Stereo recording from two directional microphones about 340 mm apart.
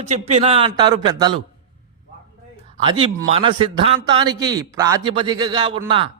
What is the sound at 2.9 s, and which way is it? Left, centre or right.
A man's voice, centre.